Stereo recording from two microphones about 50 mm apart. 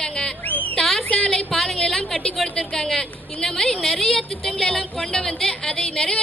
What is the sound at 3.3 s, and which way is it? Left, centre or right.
Speech, left.